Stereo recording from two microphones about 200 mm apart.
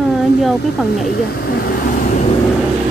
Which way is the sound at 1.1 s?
50° left (ahead or behind).